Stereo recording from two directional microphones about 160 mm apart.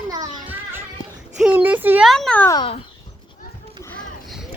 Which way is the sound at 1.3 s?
10° right (ahead or behind).